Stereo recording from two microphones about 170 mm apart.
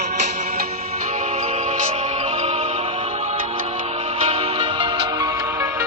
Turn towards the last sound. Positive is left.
turn(degrees=-35)  # may be behind; listen again after turning